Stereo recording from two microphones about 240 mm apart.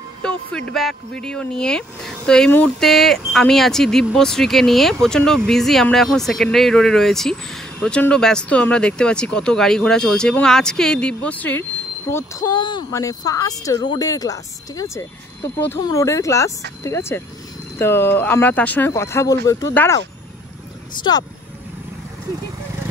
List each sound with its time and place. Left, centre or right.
0.2 s speech: centre
21.0 s speech: centre